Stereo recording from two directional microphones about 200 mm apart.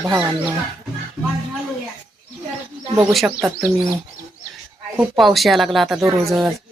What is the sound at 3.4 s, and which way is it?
Speech, 15° right (ahead or behind).